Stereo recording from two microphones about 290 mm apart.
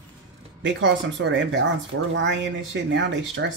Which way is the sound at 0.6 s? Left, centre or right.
Right.